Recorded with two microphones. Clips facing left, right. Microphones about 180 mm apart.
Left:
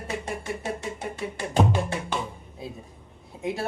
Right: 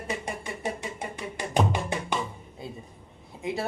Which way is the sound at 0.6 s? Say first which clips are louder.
Left 1 dB; 15° right (ahead or behind).